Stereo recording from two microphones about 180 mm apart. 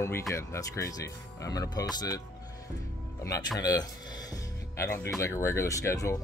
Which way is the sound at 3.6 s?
20° left (ahead or behind).